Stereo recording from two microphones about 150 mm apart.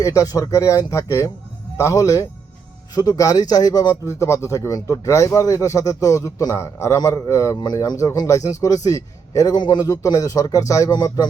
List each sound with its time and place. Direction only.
0.0 s a man's voice: 20° left (ahead or behind)